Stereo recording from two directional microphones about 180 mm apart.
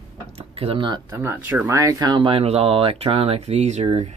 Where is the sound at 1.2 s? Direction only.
10° right (ahead or behind); by 4.2 s 40° right (ahead or behind).